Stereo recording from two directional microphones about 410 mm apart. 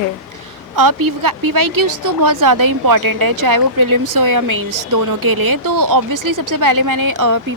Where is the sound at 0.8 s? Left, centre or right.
Right.